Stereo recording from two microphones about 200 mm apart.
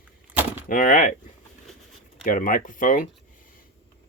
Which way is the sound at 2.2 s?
40° left (ahead or behind).